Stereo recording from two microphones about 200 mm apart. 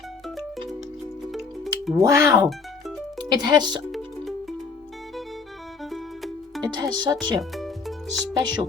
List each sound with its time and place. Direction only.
1.3 s music: centre (ahead or behind)
2.0 s speech: 15° right (ahead or behind)
3.9 s music: centre (ahead or behind)
5.8 s music: centre (ahead or behind)
6.7 s speech: 20° right (ahead or behind)
7.5 s music: centre (ahead or behind)
8.4 s speech: 20° right (ahead or behind)